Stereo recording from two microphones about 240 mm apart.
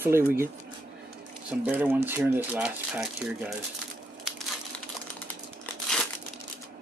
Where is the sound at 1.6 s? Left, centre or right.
Centre.